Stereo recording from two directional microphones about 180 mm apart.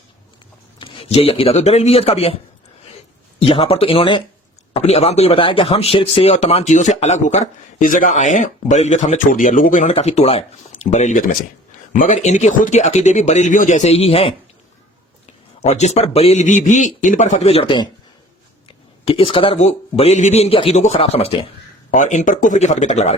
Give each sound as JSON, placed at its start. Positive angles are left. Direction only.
{"t": 0.8, "sound": "speech", "side_deg": 30}
{"t": 3.4, "sound": "speech", "side_deg": 30}
{"t": 15.6, "sound": "speech", "side_deg": 40}
{"t": 19.0, "sound": "speech", "side_deg": 30}
{"t": 21.8, "sound": "speech", "side_deg": 45}